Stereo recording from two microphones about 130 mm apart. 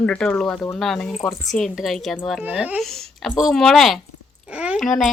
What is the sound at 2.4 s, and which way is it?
Speech, 10° right (ahead or behind).